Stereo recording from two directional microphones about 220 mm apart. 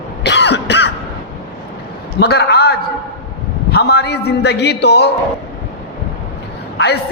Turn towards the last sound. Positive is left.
turn(degrees=50)  # may be behind; listen again after turning